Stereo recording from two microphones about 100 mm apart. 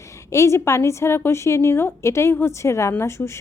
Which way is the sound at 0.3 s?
30° left (ahead or behind).